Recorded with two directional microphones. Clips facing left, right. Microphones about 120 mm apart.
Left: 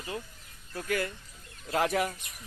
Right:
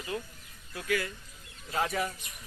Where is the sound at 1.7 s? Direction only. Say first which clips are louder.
Left 3 dB; 75° left (ahead or behind).